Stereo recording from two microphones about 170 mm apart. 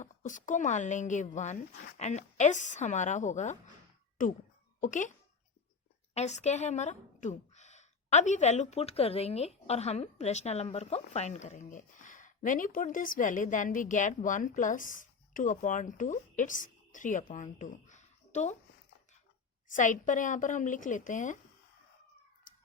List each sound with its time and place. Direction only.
0.0 s a woman's voice: 50° left (ahead or behind)
4.8 s a woman's voice: 50° left (ahead or behind)
6.1 s a woman's voice: 40° left (ahead or behind)
19.7 s a woman's voice: 50° left (ahead or behind)